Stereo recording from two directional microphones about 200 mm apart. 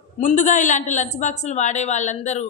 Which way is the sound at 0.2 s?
40° left (ahead or behind).